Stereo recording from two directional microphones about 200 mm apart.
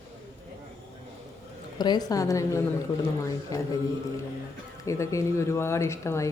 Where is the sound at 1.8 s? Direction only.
20° left (ahead or behind).